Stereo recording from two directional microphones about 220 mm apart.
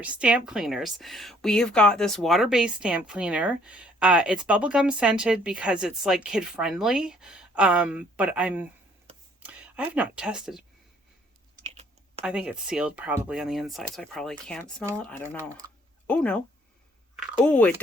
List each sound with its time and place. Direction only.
0.0 s a woman's voice: 5° right (ahead or behind)
11.6 s typing: 30° right (ahead or behind)
12.2 s a woman's voice: 5° right (ahead or behind)